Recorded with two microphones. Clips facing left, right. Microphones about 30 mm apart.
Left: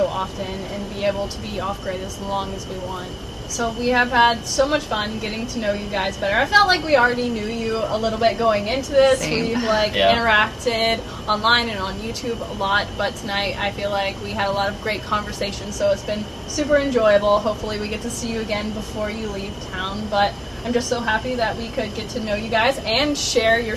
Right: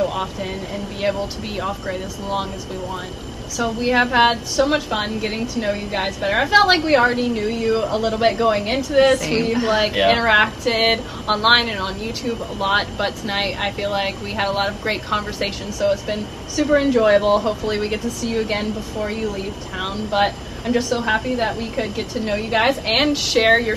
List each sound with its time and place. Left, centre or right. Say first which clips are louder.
0.0 s a woman's voice: even; centre
3.5 s a woman's voice: right 1 dB; centre